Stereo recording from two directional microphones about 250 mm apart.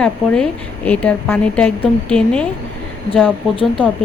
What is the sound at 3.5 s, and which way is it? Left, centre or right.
Speech, centre.